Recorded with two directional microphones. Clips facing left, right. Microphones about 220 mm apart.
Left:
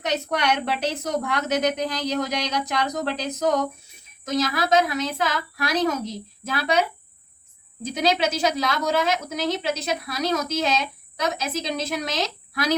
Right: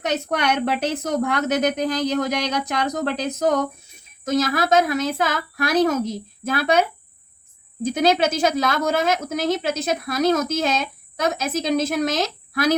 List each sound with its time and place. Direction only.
0.0 s a woman's voice: 50° right (ahead or behind)
4.3 s a woman's voice: 50° right (ahead or behind)
7.9 s a woman's voice: 50° right (ahead or behind)